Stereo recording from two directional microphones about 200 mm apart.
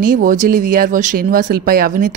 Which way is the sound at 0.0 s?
40° right (ahead or behind).